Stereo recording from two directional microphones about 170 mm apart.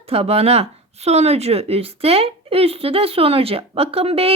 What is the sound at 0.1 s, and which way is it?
Speech, 35° right (ahead or behind).